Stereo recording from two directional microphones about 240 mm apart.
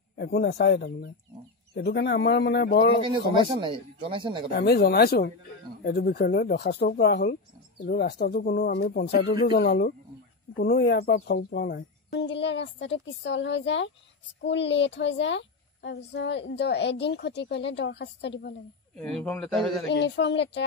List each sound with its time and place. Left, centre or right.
0.2 s a woman's voice: left
3.1 s speech: centre
4.5 s a woman's voice: left
18.9 s speech: centre
19.9 s a woman's voice: left